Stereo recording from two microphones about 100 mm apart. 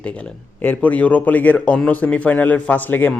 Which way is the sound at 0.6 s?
15° left (ahead or behind).